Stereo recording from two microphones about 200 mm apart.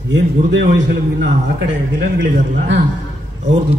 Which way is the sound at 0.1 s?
60° right (ahead or behind).